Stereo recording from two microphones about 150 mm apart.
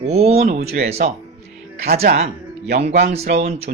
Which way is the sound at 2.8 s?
45° right (ahead or behind).